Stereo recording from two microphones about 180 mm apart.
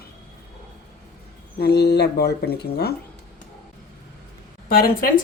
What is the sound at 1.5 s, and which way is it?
Speech, 60° left (ahead or behind).